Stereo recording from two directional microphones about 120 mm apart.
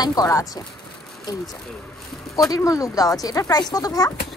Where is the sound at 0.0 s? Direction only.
30° left (ahead or behind).